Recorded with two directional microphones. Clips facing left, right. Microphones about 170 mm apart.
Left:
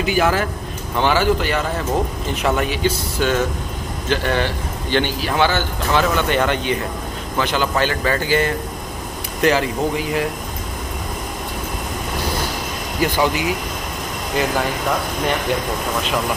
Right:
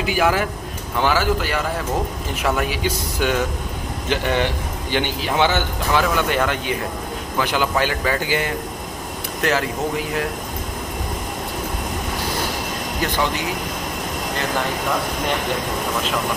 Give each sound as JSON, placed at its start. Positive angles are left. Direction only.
{"t": 0.0, "sound": "speech", "side_deg": -5}
{"t": 5.9, "sound": "speech", "side_deg": -5}
{"t": 9.4, "sound": "speech", "side_deg": 0}